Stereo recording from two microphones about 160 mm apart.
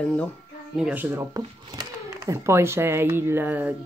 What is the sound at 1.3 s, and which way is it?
Speech, 20° right (ahead or behind).